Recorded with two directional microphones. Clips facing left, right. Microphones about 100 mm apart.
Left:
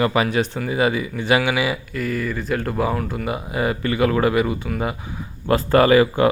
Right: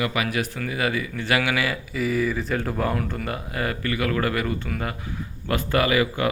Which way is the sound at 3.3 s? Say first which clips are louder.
Left 5 dB; 20° left (ahead or behind).